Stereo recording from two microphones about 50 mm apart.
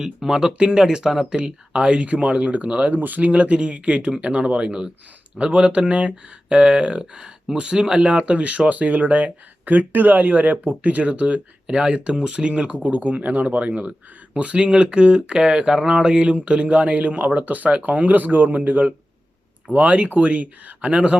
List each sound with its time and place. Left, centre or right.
0.0 s speech: centre
2.9 s speech: right